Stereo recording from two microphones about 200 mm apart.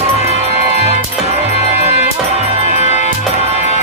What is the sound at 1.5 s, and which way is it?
Music, 35° left (ahead or behind).